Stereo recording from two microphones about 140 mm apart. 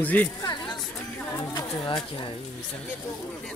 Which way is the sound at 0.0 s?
10° left (ahead or behind).